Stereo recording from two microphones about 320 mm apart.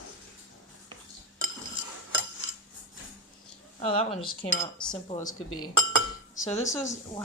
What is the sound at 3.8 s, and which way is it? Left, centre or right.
Speech, centre.